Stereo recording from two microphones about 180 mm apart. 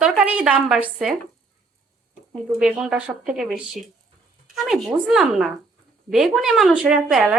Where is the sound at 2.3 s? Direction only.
5° right (ahead or behind).